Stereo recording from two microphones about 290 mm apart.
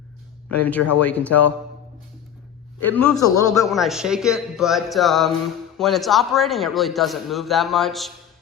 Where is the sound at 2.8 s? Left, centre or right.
Centre.